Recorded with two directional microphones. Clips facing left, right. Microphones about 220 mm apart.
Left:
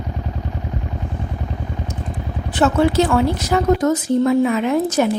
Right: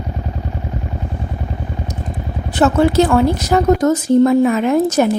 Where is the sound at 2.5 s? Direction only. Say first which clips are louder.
Right 3 dB; 45° right (ahead or behind).